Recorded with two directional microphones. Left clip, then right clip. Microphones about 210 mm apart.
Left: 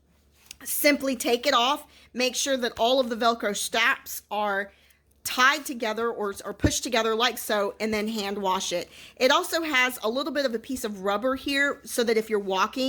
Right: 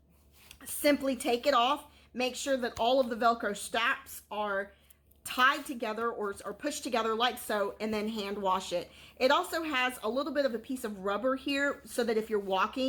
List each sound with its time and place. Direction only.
0.6 s a woman's voice: 40° left (ahead or behind)